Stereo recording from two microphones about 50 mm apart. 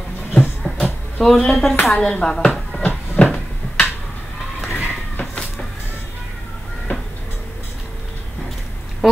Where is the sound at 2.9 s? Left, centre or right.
Left.